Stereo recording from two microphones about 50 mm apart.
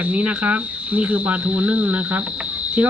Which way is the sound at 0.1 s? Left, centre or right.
Right.